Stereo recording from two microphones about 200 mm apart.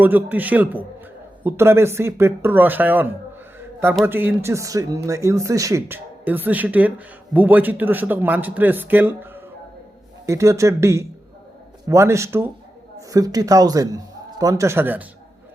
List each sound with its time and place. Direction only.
0.0 s a man's voice: 10° right (ahead or behind)